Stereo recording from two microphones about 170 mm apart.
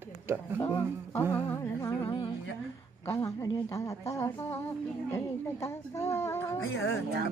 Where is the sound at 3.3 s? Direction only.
15° left (ahead or behind).